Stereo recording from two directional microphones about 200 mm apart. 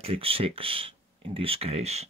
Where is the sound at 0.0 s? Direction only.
30° right (ahead or behind).